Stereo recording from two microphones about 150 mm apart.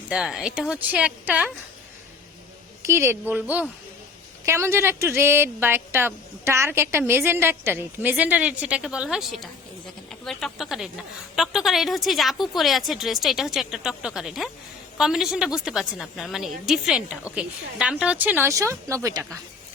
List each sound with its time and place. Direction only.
0.1 s a woman's voice: 5° right (ahead or behind)
2.8 s a woman's voice: 15° right (ahead or behind)